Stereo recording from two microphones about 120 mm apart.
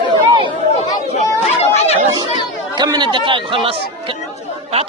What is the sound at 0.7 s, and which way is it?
Chatter, 65° left (ahead or behind).